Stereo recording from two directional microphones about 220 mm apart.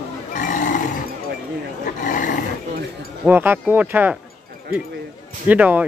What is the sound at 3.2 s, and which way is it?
Speech, 10° right (ahead or behind).